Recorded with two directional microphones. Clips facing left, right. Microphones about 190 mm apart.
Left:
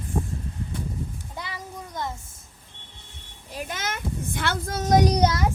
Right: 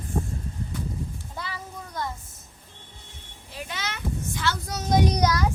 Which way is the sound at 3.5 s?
50° left (ahead or behind).